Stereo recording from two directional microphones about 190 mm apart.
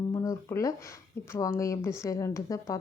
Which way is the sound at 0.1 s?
15° left (ahead or behind).